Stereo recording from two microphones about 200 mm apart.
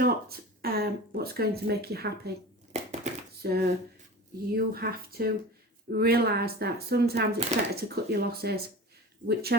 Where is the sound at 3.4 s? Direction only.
50° right (ahead or behind).